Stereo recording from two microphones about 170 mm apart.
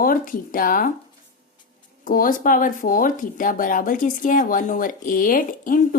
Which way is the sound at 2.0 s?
55° left (ahead or behind).